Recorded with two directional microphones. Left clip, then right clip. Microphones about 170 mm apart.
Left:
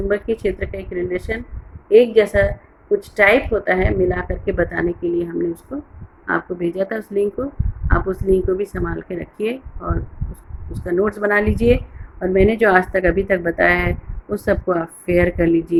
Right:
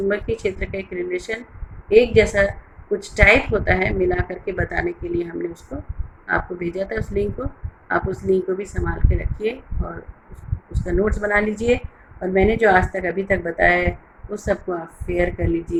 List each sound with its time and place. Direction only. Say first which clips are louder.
0.1 s speech: left 3 dB; 40° left (ahead or behind)
6.2 s speech: left 2 dB; 50° left (ahead or behind)
10.8 s speech: left 3 dB; 60° left (ahead or behind)